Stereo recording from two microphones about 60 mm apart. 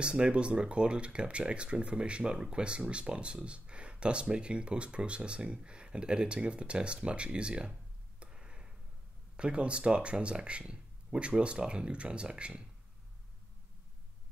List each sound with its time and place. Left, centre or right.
0.0 s speech: centre
8.2 s a sound: centre
9.4 s speech: centre